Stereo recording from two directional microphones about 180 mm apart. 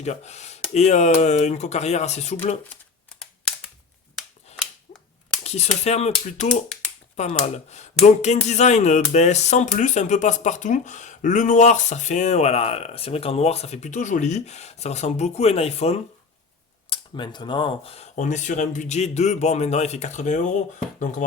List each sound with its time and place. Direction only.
0.0 s speech: 40° left (ahead or behind)
4.5 s a sound: 35° left (ahead or behind)
5.4 s speech: 35° left (ahead or behind)